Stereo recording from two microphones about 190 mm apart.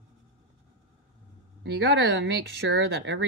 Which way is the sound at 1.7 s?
65° right (ahead or behind).